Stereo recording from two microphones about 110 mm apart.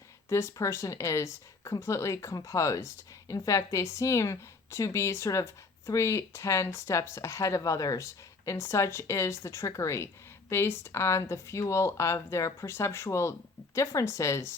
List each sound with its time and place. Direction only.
0.3 s speech: 25° left (ahead or behind)